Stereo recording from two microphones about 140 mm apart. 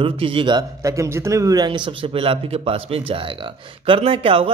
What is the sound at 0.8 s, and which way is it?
Speech, 20° right (ahead or behind).